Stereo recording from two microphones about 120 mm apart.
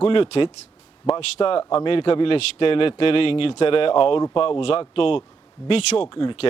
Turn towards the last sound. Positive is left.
turn(degrees=45)  # may be behind; listen again after turning